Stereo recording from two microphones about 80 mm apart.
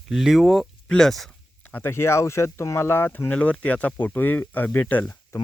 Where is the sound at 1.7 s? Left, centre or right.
Left.